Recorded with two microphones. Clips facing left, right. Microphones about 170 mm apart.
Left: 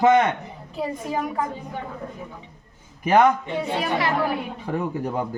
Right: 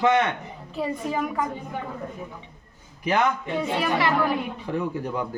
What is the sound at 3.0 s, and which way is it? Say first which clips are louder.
Speech: left 6 dB; 50° left (ahead or behind).